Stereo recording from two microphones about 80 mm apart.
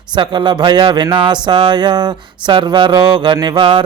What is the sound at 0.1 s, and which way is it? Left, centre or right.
A man's voice, right.